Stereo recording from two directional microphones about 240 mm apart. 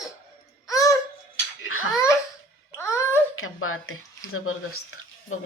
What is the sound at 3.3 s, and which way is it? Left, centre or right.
Speech, left.